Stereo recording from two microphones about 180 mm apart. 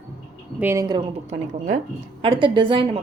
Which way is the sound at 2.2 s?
30° right (ahead or behind).